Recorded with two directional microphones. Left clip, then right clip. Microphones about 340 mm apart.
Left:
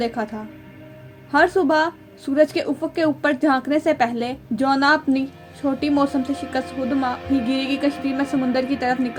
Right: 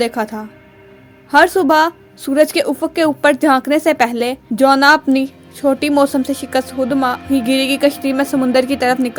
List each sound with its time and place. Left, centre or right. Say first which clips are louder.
0.0 s a woman's voice: right 7 dB; right